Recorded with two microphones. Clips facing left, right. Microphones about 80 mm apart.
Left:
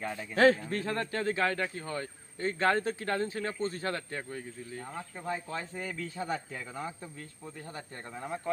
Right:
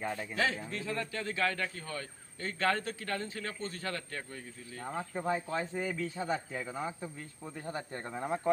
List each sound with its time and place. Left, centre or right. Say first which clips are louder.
0.0 s speech: right 1 dB; centre
0.3 s a man's voice: left 12 dB; left; by 4.4 s centre
4.8 s speech: right 8 dB; centre
7.6 s speech: right 5 dB; right